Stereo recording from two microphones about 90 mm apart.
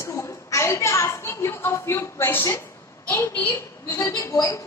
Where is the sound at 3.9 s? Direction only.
35° left (ahead or behind).